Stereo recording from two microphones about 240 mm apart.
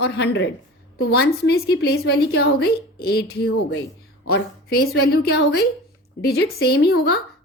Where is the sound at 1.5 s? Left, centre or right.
Left.